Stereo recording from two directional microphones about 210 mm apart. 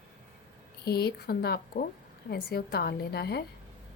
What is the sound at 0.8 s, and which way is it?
A woman's voice, 50° left (ahead or behind).